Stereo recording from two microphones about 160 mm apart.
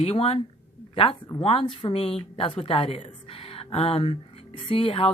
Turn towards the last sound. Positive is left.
turn(degrees=35)  # may be behind; listen again after turning